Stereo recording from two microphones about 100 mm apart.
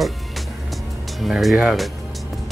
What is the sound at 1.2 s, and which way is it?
Speech, centre (ahead or behind).